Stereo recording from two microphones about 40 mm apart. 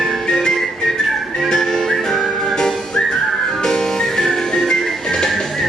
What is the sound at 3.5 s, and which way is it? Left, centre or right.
Music, centre.